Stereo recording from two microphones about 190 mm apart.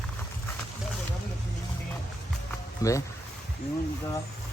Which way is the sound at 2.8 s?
15° left (ahead or behind).